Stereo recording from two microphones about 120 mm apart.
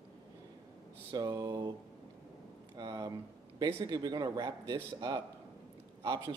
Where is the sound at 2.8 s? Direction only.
35° right (ahead or behind).